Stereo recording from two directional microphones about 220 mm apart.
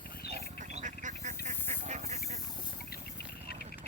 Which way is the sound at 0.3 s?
30° right (ahead or behind).